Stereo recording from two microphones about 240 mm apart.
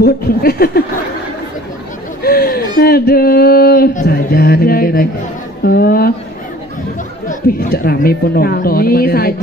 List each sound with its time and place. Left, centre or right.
0.0 s speech: left
2.2 s speech: left
7.2 s speech: left